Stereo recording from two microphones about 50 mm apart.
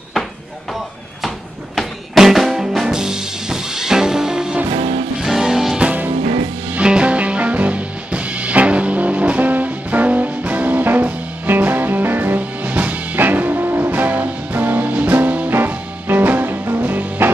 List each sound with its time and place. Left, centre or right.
1.8 s music: centre
6.8 s music: right
15.5 s music: right